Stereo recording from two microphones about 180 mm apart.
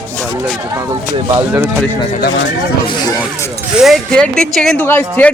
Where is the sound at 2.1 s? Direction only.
55° left (ahead or behind).